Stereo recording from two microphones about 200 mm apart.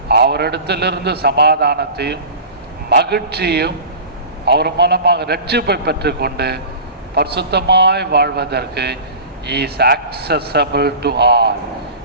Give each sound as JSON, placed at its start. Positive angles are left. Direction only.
{"t": 0.1, "sound": "a man's voice", "side_deg": -55}